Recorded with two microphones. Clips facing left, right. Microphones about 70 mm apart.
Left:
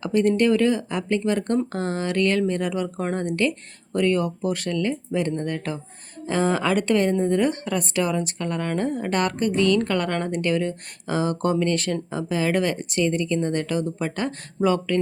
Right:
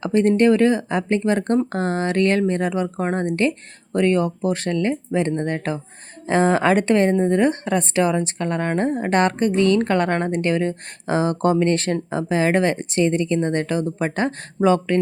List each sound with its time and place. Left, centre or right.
0.0 s speech: right